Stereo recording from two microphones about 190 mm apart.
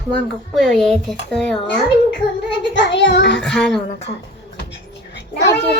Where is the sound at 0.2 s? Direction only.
5° left (ahead or behind).